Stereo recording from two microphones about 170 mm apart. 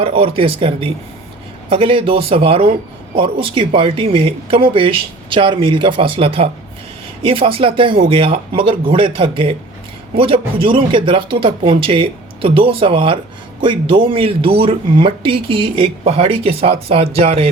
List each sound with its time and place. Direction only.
0.0 s speech: 35° right (ahead or behind)